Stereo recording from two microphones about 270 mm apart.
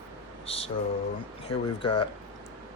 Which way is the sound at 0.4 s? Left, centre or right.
Left.